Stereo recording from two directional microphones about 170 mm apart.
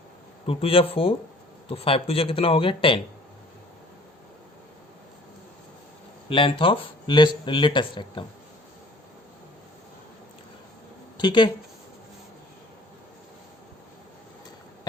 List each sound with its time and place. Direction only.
0.4 s speech: 35° left (ahead or behind)
6.2 s speech: 30° left (ahead or behind)
11.2 s speech: 25° left (ahead or behind)